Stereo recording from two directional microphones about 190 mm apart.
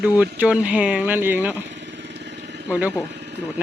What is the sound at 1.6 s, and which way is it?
Vehicle, 70° right (ahead or behind).